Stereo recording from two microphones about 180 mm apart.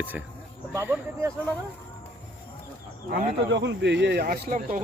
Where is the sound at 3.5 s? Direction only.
85° right; by 4.8 s 50° right (ahead or behind).